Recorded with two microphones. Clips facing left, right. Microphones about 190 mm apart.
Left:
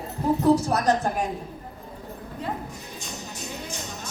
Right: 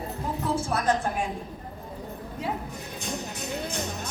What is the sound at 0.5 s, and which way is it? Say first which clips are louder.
Speech: left 3 dB; 40° left (ahead or behind).